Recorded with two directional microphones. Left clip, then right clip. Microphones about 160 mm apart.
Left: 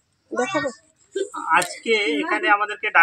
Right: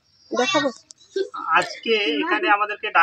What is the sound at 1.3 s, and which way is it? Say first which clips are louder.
Speech: left 1 dB; 5° left (ahead or behind).